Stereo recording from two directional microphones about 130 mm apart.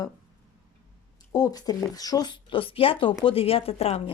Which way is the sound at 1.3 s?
30° left (ahead or behind).